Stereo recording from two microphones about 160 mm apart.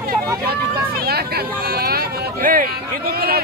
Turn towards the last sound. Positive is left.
turn(degrees=-70)  # may be behind; listen again after turning